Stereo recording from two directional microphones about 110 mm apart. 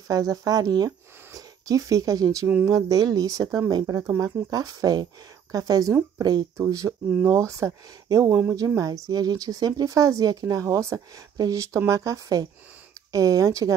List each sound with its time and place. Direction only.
0.1 s speech: 35° right (ahead or behind)
2.4 s speech: 15° right (ahead or behind)
2.9 s speech: 35° right (ahead or behind)